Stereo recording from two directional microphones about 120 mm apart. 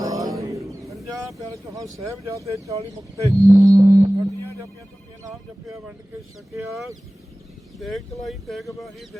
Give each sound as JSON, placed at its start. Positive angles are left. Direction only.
{"t": 0.0, "sound": "bird", "side_deg": -30}
{"t": 1.4, "sound": "speech", "side_deg": -30}
{"t": 2.6, "sound": "livestock", "side_deg": -30}
{"t": 7.8, "sound": "speech", "side_deg": 0}